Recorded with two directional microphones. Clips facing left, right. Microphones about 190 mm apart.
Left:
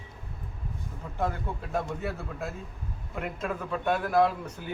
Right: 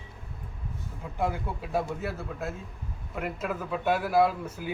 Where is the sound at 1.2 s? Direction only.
5° right (ahead or behind).